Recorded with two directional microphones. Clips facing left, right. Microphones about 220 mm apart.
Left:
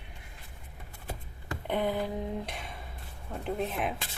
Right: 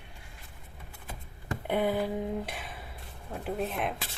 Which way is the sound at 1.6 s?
5° right (ahead or behind).